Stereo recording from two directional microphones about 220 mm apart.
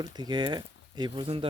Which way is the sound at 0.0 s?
20° right (ahead or behind).